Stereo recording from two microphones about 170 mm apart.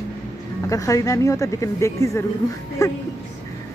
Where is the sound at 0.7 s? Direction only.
20° left (ahead or behind).